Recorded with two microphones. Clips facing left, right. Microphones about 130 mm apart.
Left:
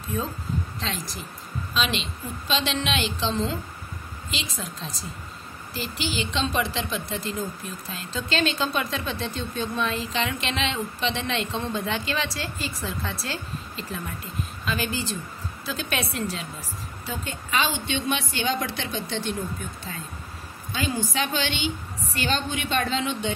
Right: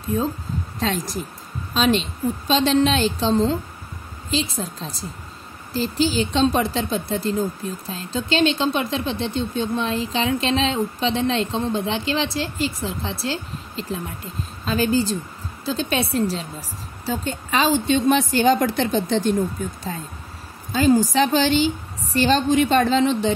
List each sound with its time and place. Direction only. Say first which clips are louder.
0.7 s a woman's voice: right 8 dB; 45° right (ahead or behind)
20.8 s a woman's voice: right 11 dB; 40° right (ahead or behind)